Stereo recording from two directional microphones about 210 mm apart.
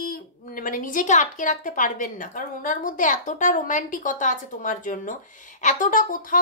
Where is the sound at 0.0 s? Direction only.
45° left (ahead or behind).